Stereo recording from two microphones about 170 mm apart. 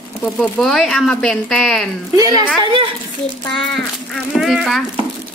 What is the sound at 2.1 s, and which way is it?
Speech, 20° right (ahead or behind).